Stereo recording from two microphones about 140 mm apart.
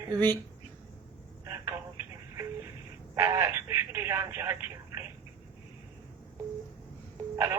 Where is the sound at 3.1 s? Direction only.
20° right (ahead or behind).